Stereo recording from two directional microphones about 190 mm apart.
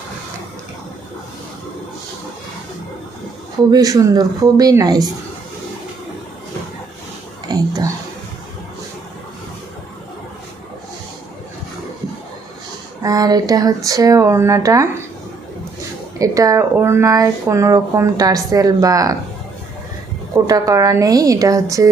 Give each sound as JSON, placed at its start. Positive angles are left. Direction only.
{"t": 3.7, "sound": "speech", "side_deg": -20}
{"t": 7.4, "sound": "a sound", "side_deg": -20}
{"t": 13.0, "sound": "speech", "side_deg": -20}
{"t": 16.1, "sound": "speech", "side_deg": -15}
{"t": 20.3, "sound": "speech", "side_deg": -20}